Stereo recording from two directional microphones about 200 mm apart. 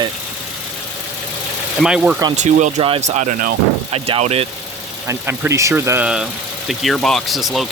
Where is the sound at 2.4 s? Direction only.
35° right (ahead or behind).